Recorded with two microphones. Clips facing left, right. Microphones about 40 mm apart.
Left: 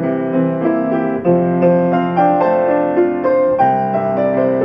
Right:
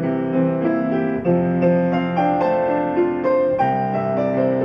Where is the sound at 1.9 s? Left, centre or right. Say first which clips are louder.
Left 5 dB; centre.